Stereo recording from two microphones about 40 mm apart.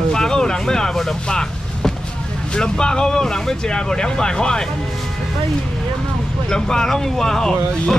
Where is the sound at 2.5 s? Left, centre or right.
Centre.